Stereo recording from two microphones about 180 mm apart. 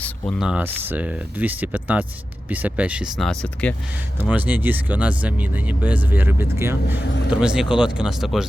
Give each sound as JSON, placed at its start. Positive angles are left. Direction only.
{"t": 0.0, "sound": "speech", "side_deg": 0}
{"t": 4.2, "sound": "speech", "side_deg": -10}
{"t": 7.3, "sound": "speech", "side_deg": -5}